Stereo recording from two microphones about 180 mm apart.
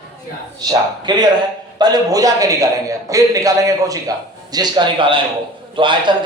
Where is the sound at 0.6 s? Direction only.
20° right (ahead or behind).